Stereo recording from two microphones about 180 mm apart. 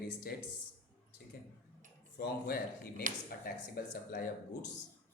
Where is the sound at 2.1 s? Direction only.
60° left (ahead or behind).